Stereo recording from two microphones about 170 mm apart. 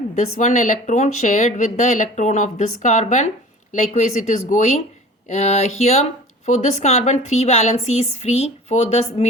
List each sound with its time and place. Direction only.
0.2 s a woman's voice: 45° left (ahead or behind)